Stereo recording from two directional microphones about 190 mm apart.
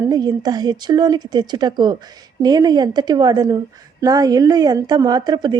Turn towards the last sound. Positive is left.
turn(degrees=-20)  # may be behind; listen again after turning